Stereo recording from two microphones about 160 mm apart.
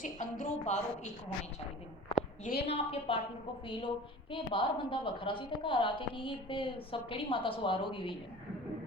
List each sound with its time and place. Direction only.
0.0 s a woman's voice: 50° left (ahead or behind)
2.4 s a woman's voice: 70° left (ahead or behind)
2.6 s a woman's voice: 35° left (ahead or behind)